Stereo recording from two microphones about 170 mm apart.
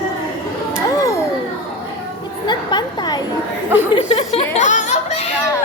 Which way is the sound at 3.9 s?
35° left (ahead or behind).